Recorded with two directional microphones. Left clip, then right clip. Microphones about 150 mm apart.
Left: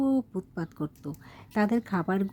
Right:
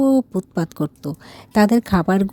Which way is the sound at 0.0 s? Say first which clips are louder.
Right 11 dB; 35° right (ahead or behind).